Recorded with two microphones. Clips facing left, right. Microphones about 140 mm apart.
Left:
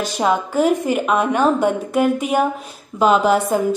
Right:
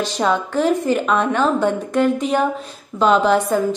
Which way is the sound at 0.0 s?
10° left (ahead or behind).